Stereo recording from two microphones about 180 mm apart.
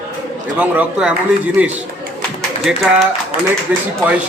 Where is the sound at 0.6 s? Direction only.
5° right (ahead or behind).